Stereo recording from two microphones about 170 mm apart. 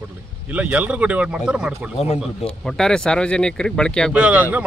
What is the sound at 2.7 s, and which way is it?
Speech, 5° left (ahead or behind).